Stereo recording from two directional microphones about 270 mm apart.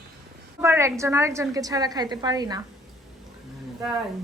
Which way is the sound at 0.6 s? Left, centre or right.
Centre.